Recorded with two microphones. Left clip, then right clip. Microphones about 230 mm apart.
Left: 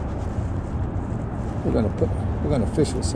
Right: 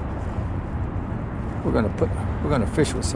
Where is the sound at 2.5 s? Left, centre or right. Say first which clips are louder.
Right 1 dB; centre.